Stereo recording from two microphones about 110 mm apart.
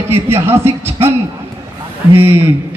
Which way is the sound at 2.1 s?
20° right (ahead or behind).